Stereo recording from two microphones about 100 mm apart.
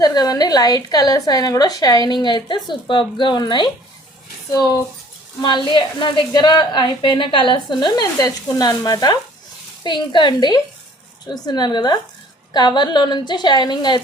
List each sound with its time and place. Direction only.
0.0 s a woman's voice: 40° left (ahead or behind)
5.4 s a woman's voice: 50° left (ahead or behind)